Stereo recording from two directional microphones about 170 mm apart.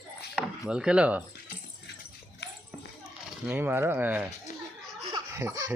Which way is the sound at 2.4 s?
90° left.